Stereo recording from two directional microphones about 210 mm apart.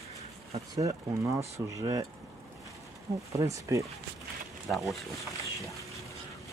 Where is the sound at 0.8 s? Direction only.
15° right (ahead or behind).